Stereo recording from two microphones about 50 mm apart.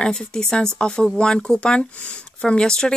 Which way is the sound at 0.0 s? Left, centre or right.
Centre.